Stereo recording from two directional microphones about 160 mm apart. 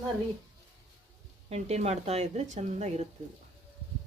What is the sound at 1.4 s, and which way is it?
A woman's voice, 45° right (ahead or behind).